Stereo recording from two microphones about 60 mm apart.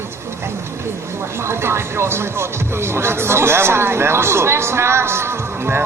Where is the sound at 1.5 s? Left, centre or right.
Right.